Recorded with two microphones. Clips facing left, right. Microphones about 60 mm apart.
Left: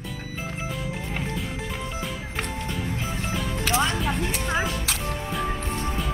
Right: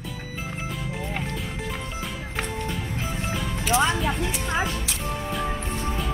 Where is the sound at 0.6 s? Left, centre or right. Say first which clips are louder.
Even; centre.